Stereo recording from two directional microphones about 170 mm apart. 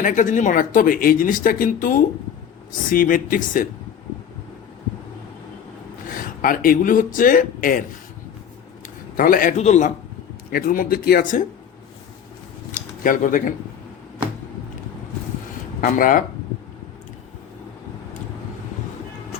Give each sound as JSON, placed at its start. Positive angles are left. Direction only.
{"t": 0.0, "sound": "speech", "side_deg": 50}
{"t": 6.1, "sound": "speech", "side_deg": 55}
{"t": 9.1, "sound": "speech", "side_deg": 55}
{"t": 10.5, "sound": "speech", "side_deg": 60}
{"t": 12.7, "sound": "a sound", "side_deg": 50}
{"t": 15.8, "sound": "speech", "side_deg": 55}